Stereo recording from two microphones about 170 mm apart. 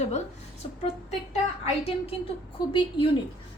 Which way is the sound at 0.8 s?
40° left (ahead or behind).